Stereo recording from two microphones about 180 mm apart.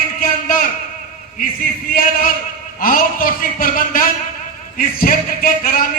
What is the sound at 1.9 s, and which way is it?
A man's voice, 55° left (ahead or behind).